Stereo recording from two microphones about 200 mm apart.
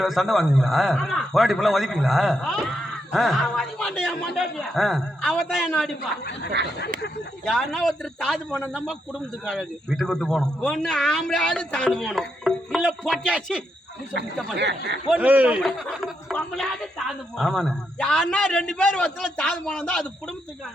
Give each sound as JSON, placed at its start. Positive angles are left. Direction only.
{"t": 0.0, "sound": "a man's voice", "side_deg": 0}
{"t": 6.0, "sound": "speech", "side_deg": 50}
{"t": 7.4, "sound": "a man's voice", "side_deg": 0}
{"t": 9.5, "sound": "a man's voice", "side_deg": 0}
{"t": 14.6, "sound": "speech", "side_deg": -60}
{"t": 15.1, "sound": "a man's voice", "side_deg": -10}